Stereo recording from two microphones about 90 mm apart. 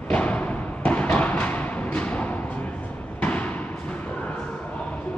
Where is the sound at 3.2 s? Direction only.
15° left (ahead or behind).